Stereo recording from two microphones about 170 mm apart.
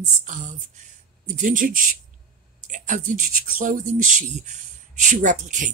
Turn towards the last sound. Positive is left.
turn(degrees=-45)  # may be behind; listen again after turning